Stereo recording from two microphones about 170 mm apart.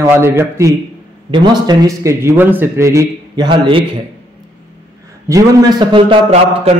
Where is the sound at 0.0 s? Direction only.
15° right (ahead or behind).